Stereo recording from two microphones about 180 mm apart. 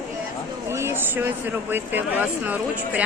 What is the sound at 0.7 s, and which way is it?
Speech, 15° right (ahead or behind).